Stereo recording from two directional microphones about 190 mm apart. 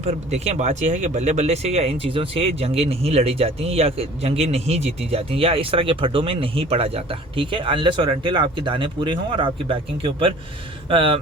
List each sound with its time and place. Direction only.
0.0 s speech: 35° right (ahead or behind)